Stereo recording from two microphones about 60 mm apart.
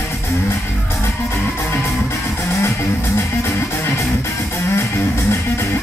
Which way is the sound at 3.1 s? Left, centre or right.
Left.